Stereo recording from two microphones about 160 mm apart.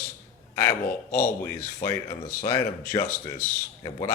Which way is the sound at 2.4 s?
25° left (ahead or behind).